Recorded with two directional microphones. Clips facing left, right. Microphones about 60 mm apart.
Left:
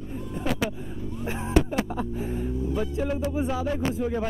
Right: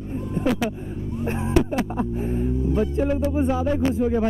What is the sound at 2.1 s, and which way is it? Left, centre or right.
Speech, right.